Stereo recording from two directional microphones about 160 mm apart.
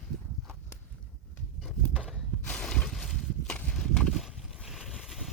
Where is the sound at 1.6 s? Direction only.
5° right (ahead or behind).